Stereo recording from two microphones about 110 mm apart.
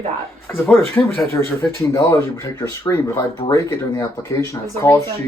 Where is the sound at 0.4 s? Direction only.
20° left (ahead or behind).